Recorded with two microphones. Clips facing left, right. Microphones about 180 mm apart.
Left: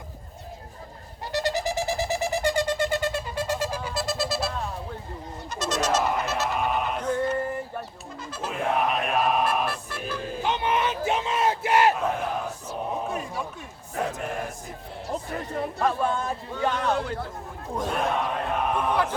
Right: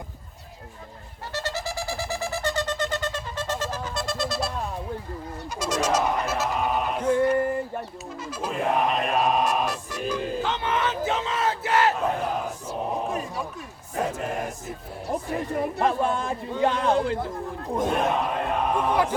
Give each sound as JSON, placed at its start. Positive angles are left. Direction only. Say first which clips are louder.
{"t": 1.3, "sound": "a sound", "louder": "left 5 dB", "side_deg": 15}
{"t": 5.5, "sound": "bird", "louder": "right 1 dB", "side_deg": -10}
{"t": 6.2, "sound": "music", "louder": "right 1 dB", "side_deg": -10}
{"t": 8.4, "sound": "a sound", "louder": "right 1 dB", "side_deg": 0}
{"t": 9.6, "sound": "music", "louder": "right 3 dB", "side_deg": -15}
{"t": 10.4, "sound": "battle cry", "louder": "left 5 dB", "side_deg": 15}
{"t": 11.9, "sound": "battle cry", "louder": "right 1 dB", "side_deg": 0}
{"t": 12.9, "sound": "a sound", "louder": "right 1 dB", "side_deg": 0}
{"t": 15.1, "sound": "a man's voice", "louder": "right 4 dB", "side_deg": -15}
{"t": 17.9, "sound": "chant", "louder": "left 1 dB", "side_deg": 0}